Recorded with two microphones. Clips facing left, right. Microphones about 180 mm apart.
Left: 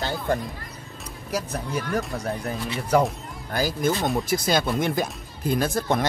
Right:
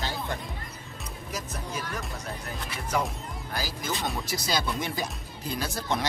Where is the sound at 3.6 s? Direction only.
50° left (ahead or behind).